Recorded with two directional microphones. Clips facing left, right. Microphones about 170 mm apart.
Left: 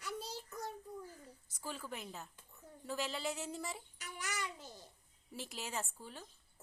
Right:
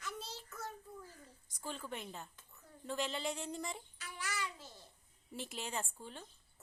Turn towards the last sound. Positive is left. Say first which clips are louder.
# even
turn(degrees=5)  # may be behind; listen again after turning